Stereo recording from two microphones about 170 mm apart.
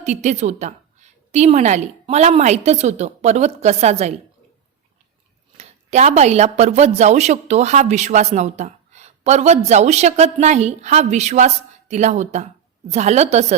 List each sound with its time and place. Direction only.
0.0 s speech: 45° right (ahead or behind)
5.5 s speech: 40° right (ahead or behind)